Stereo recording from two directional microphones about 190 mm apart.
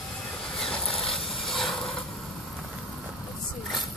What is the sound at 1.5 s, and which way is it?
Vehicle, centre (ahead or behind).